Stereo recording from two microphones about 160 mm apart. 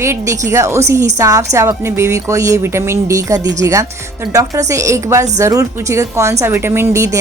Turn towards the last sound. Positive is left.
turn(degrees=-20)  # may be behind; listen again after turning